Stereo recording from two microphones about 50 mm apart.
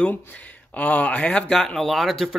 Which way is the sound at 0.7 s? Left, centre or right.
Left.